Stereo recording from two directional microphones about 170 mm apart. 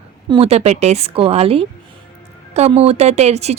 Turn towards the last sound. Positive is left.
turn(degrees=-40)  # may be behind; listen again after turning